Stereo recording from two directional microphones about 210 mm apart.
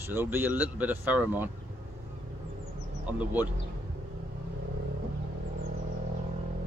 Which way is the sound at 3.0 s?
5° right (ahead or behind).